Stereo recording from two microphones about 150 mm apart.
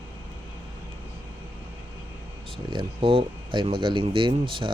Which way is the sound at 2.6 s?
35° right (ahead or behind).